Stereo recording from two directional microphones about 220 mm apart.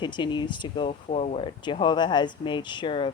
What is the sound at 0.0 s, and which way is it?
Speech, 20° left (ahead or behind).